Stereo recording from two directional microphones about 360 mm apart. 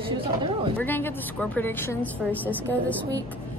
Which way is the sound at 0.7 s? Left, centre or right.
Centre.